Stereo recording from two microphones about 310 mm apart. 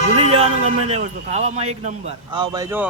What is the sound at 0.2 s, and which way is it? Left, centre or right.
A man's voice, centre.